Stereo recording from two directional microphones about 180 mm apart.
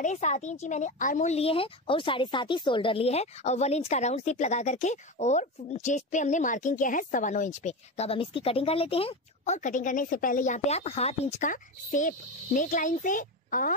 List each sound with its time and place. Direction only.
0.0 s speech: 40° left (ahead or behind)